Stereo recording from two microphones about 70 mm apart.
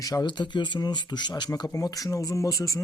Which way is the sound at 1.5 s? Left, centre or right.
Left.